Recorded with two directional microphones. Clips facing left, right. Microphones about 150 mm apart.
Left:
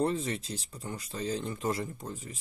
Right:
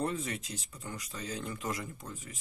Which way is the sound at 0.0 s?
30° left (ahead or behind).